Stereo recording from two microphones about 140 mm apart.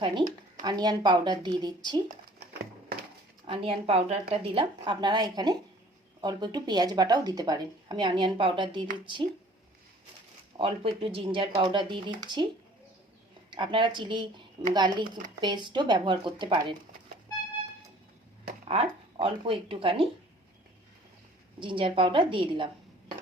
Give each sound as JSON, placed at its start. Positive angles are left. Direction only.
{"t": 0.0, "sound": "speech", "side_deg": -35}
{"t": 3.4, "sound": "speech", "side_deg": -40}
{"t": 10.6, "sound": "speech", "side_deg": -40}
{"t": 13.5, "sound": "speech", "side_deg": -35}
{"t": 19.2, "sound": "speech", "side_deg": -40}
{"t": 21.6, "sound": "speech", "side_deg": -40}